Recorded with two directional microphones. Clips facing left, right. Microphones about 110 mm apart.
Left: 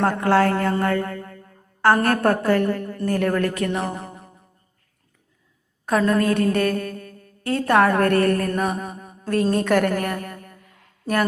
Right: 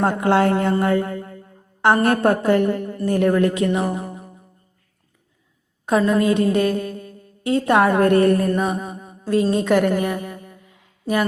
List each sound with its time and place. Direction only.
0.0 s a woman's voice: 20° right (ahead or behind)
0.7 s music: 15° right (ahead or behind)
2.0 s a woman's voice: 20° right (ahead or behind)
6.1 s a woman's voice: 15° right (ahead or behind)
9.0 s a sound: 5° right (ahead or behind)